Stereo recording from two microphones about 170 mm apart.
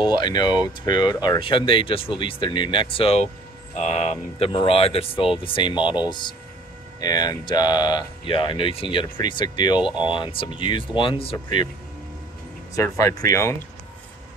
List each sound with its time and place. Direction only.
0.0 s speech: 25° left (ahead or behind)
9.8 s speech: 5° right (ahead or behind)
10.0 s speech: 30° left (ahead or behind)
12.7 s speech: 20° left (ahead or behind)